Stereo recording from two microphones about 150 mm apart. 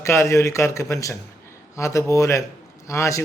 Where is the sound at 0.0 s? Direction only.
20° left (ahead or behind).